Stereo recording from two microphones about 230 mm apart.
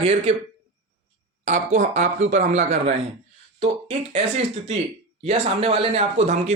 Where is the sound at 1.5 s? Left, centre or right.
Right.